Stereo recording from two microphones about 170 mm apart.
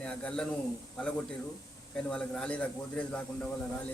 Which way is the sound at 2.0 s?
5° left (ahead or behind).